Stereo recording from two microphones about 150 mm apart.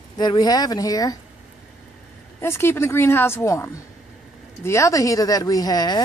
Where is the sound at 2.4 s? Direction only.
15° left (ahead or behind).